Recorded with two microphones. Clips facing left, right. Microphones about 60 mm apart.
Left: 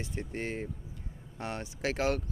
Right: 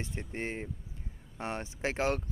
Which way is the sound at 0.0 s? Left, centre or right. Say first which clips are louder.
Left 1 dB; right.